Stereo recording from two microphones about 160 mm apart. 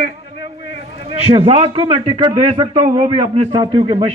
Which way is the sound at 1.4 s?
35° right (ahead or behind).